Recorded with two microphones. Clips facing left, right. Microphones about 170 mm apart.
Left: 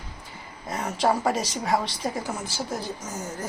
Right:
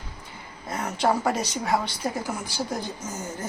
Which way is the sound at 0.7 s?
Centre (ahead or behind).